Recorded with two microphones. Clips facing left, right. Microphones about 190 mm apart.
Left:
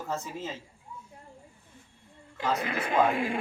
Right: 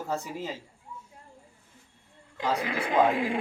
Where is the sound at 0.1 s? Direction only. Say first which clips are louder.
Right 2 dB; 15° right (ahead or behind).